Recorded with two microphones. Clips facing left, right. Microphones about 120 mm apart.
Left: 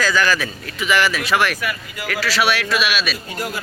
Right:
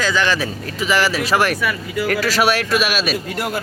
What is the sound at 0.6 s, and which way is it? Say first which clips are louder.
Speech: even; 35° right (ahead or behind).